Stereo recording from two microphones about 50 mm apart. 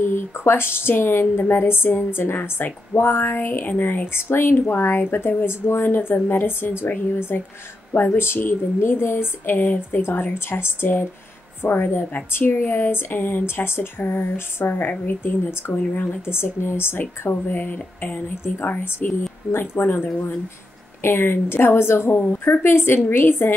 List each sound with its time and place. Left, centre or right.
0.0 s speech: left
19.5 s speech: left
22.2 s speech: left